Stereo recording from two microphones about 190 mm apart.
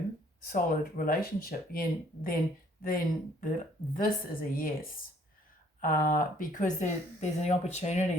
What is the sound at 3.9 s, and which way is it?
Speech, 50° left (ahead or behind).